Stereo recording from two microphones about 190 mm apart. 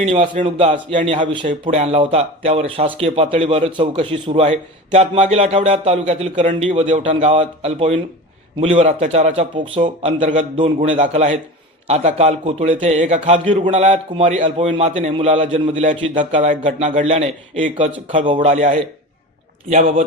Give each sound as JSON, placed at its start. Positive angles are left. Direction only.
{"t": 0.0, "sound": "speech", "side_deg": -30}